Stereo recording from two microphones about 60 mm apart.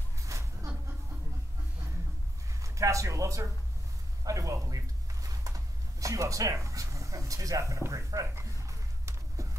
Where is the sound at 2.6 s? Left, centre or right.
Right.